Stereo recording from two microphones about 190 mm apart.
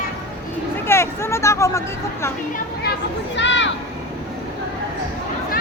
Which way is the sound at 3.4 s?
70° left (ahead or behind).